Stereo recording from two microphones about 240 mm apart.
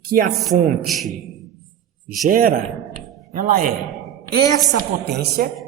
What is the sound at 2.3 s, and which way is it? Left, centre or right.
A man's voice, right.